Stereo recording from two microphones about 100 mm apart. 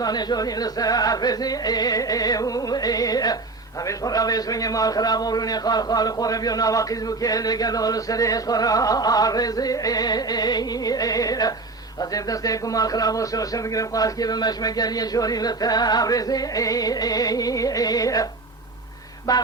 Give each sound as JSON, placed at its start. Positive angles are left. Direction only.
{"t": 0.0, "sound": "a man's voice", "side_deg": 45}
{"t": 19.3, "sound": "a man's voice", "side_deg": 35}